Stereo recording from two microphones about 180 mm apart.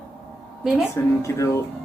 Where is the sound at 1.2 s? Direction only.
15° left (ahead or behind).